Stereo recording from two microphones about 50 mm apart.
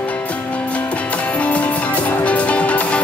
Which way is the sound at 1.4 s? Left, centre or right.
Left.